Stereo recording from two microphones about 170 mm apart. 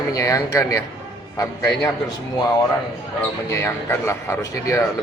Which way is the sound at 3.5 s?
15° left (ahead or behind).